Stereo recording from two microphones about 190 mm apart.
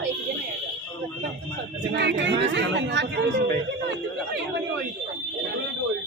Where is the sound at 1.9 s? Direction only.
65° right (ahead or behind).